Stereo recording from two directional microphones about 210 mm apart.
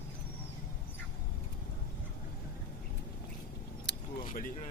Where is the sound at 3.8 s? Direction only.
40° left (ahead or behind).